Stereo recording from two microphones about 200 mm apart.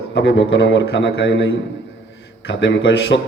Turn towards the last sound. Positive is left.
turn(degrees=65)  # may be behind; listen again after turning